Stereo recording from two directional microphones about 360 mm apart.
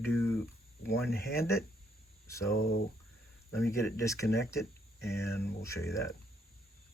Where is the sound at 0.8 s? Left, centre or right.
Left.